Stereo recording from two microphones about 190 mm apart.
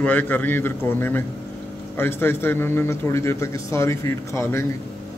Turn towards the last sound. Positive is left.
turn(degrees=15)  # may be behind; listen again after turning